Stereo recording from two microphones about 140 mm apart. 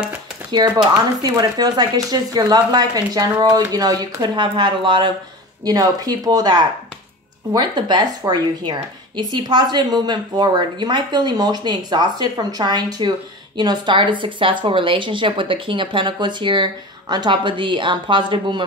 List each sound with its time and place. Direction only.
0.6 s a woman's voice: 30° right (ahead or behind)